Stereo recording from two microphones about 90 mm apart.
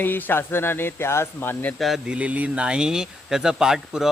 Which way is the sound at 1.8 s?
Centre (ahead or behind).